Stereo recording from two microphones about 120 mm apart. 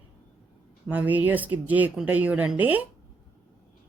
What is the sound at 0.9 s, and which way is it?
A woman's voice, 15° right (ahead or behind).